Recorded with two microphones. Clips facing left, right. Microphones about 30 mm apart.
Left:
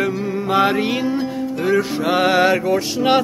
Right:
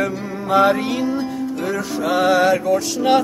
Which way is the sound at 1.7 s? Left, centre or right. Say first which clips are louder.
Left 1 dB; left.